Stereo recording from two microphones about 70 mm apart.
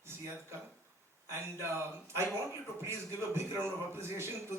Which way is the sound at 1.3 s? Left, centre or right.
Right.